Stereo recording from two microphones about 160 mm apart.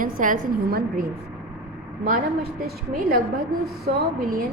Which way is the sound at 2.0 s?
65° right (ahead or behind).